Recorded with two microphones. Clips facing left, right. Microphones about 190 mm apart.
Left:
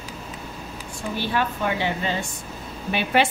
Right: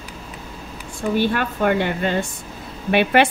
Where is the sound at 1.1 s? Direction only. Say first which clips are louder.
Right 4 dB; 55° right (ahead or behind).